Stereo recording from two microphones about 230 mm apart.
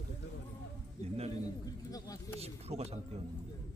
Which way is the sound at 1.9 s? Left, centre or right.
Centre.